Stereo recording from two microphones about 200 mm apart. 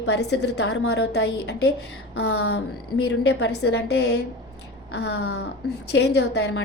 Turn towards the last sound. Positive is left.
turn(degrees=55)  # may be behind; listen again after turning